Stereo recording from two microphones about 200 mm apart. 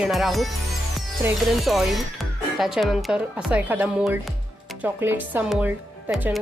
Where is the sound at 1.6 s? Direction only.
Centre (ahead or behind).